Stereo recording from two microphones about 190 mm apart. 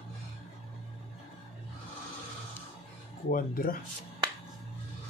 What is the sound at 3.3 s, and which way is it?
Speech, 50° left (ahead or behind).